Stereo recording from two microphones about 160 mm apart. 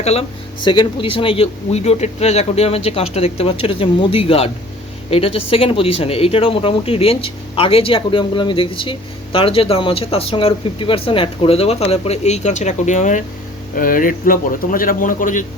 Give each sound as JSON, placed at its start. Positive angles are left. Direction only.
{"t": 0.0, "sound": "speech", "side_deg": 40}